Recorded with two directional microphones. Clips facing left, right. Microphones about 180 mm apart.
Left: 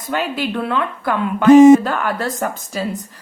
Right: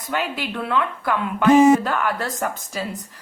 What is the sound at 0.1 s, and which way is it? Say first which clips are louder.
A woman's voice: left 5 dB; 35° left (ahead or behind).